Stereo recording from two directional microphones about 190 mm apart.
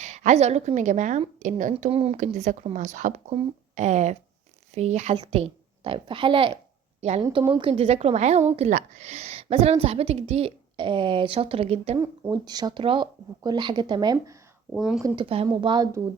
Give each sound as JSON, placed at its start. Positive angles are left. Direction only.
{"t": 0.0, "sound": "a woman's voice", "side_deg": -40}
{"t": 12.3, "sound": "speech", "side_deg": -20}
{"t": 14.7, "sound": "speech", "side_deg": -5}
{"t": 15.0, "sound": "speech", "side_deg": -25}